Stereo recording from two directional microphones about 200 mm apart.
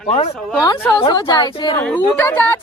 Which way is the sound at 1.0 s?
25° left (ahead or behind).